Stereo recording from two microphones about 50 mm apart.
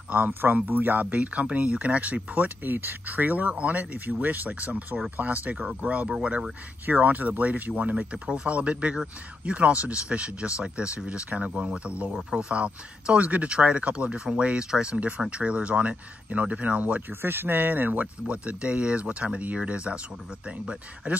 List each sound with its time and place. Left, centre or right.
0.3 s speech: right
6.0 s speech: centre
6.9 s speech: right; by 15.0 s centre
15.0 s speech: right
17.1 s speech: right
18.2 s speech: right